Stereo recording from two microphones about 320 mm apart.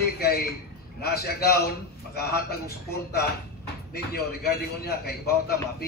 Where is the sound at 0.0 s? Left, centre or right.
Left.